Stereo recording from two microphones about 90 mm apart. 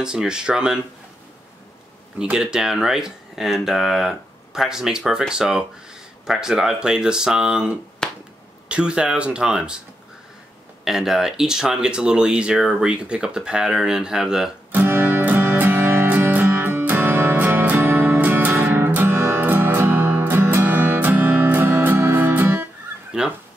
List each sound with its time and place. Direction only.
0.0 s speech: 10° right (ahead or behind)
2.1 s speech: 10° right (ahead or behind)
8.0 s finger snapping: 5° left (ahead or behind)
8.6 s speech: 10° right (ahead or behind)
10.8 s speech: 5° right (ahead or behind)
14.7 s music: 20° right (ahead or behind)
23.1 s crow: 10° right (ahead or behind)